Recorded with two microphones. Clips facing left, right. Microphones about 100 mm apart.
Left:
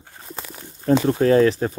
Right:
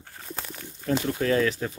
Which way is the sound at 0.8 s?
35° left (ahead or behind).